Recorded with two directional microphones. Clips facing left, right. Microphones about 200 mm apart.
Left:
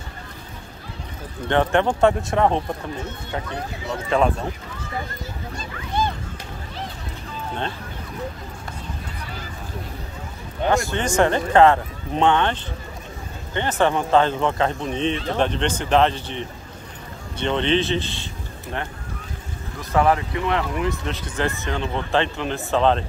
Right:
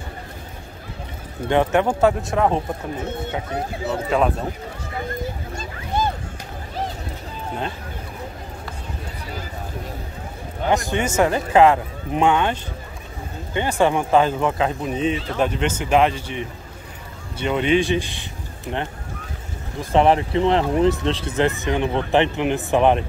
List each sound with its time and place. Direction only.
1.5 s speech: 10° right (ahead or behind)
4.1 s speech: 5° right (ahead or behind)
5.6 s a sound: 40° right (ahead or behind)
10.7 s speech: 15° right (ahead or behind)